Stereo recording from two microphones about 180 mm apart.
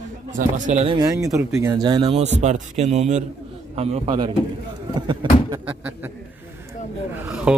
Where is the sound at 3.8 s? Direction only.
25° right (ahead or behind).